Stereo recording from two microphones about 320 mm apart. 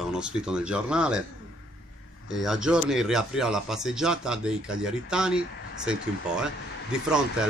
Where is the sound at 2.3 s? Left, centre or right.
Centre.